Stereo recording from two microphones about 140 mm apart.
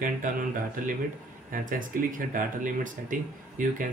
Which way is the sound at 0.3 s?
70° right (ahead or behind).